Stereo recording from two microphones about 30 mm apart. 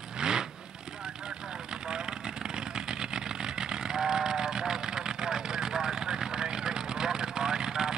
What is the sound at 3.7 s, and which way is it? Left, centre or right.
Vehicle, right.